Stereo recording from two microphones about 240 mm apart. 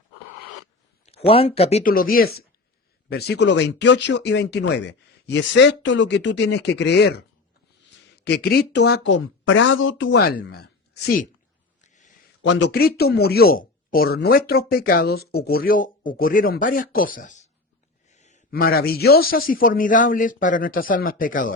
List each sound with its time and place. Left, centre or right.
1.0 s speech: left
11.8 s a sound: left
12.4 s speech: left